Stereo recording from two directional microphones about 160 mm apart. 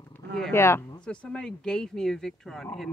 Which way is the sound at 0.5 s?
15° left (ahead or behind).